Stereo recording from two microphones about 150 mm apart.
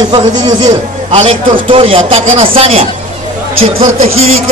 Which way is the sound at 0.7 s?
45° right (ahead or behind).